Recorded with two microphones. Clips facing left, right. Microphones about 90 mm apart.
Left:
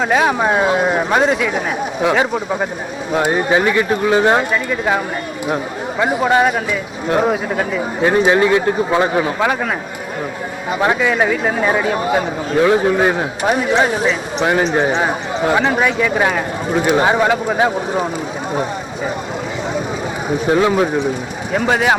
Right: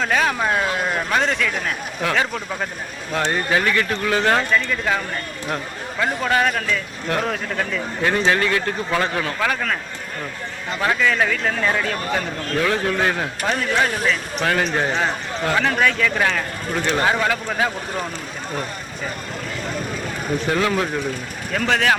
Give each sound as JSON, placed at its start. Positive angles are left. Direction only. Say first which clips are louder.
{"t": 0.0, "sound": "speech", "louder": "left 5 dB", "side_deg": 15}
{"t": 6.1, "sound": "speech", "louder": "left 6 dB", "side_deg": 10}
{"t": 10.8, "sound": "speech", "louder": "left 4 dB", "side_deg": 20}
{"t": 20.4, "sound": "speech", "louder": "left 7 dB", "side_deg": 20}